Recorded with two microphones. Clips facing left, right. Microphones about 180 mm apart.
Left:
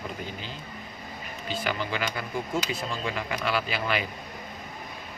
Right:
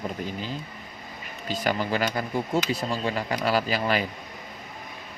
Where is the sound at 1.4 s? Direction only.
40° right (ahead or behind).